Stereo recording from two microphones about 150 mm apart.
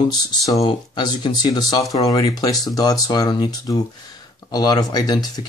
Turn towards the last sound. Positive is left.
turn(degrees=25)  # may be behind; listen again after turning